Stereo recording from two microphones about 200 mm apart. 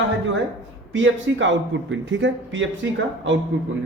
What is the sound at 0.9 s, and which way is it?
Speech, 70° right (ahead or behind).